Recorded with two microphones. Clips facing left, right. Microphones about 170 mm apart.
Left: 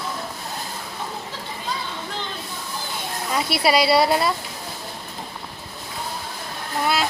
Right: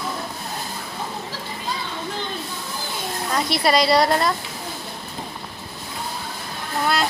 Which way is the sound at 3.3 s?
5° left (ahead or behind).